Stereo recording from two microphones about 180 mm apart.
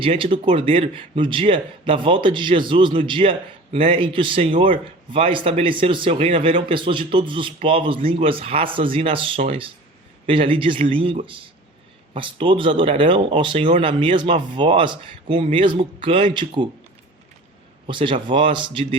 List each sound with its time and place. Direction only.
0.0 s a man's voice: 30° right (ahead or behind)
17.8 s a man's voice: 25° right (ahead or behind)